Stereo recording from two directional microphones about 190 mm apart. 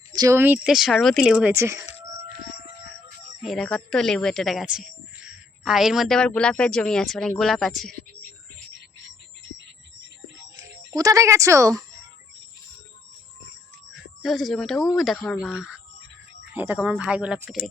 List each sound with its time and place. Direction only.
0.1 s speech: 20° right (ahead or behind)
3.4 s speech: centre (ahead or behind)
10.6 s speech: 15° right (ahead or behind)
13.9 s speech: centre (ahead or behind)